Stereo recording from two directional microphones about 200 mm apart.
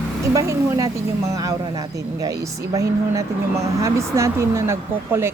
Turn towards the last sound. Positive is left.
turn(degrees=-15)  # may be behind; listen again after turning